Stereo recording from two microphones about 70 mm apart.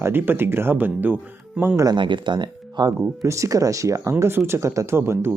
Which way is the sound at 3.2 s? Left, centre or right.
Right.